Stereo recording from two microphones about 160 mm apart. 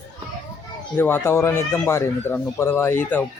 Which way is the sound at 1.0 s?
15° left (ahead or behind).